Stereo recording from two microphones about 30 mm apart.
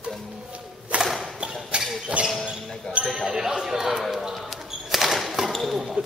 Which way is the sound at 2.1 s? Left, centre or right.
Right.